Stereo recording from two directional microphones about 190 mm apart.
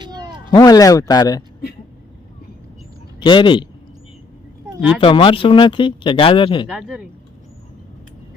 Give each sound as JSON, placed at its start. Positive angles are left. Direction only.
{"t": 0.0, "sound": "cat", "side_deg": -20}
{"t": 0.5, "sound": "speech", "side_deg": 20}
{"t": 3.2, "sound": "speech", "side_deg": 25}
{"t": 4.9, "sound": "speech", "side_deg": 25}
{"t": 6.7, "sound": "speech", "side_deg": 0}